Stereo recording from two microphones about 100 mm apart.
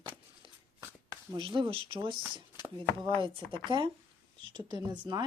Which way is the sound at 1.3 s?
60° right (ahead or behind).